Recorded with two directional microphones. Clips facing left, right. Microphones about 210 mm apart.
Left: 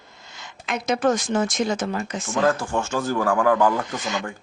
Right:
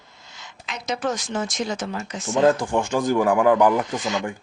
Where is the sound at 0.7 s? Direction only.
50° left (ahead or behind).